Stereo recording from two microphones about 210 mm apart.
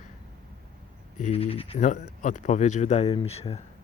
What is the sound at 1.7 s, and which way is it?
Speech, 35° left (ahead or behind).